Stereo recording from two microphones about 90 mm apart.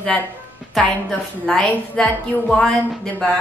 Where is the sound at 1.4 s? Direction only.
10° left (ahead or behind).